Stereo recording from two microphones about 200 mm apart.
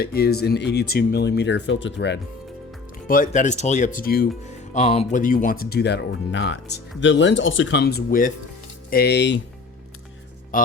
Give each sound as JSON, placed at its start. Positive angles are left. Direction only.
{"t": 0.0, "sound": "speech", "side_deg": 50}
{"t": 3.1, "sound": "speech", "side_deg": 40}
{"t": 4.7, "sound": "speech", "side_deg": 35}
{"t": 10.5, "sound": "speech", "side_deg": 45}